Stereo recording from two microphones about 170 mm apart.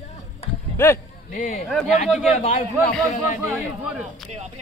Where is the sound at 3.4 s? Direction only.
10° right (ahead or behind).